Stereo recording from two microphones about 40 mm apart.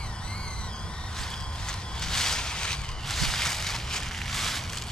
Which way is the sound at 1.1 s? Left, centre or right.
Centre.